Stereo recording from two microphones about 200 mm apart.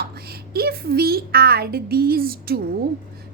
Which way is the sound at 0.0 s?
50° right (ahead or behind).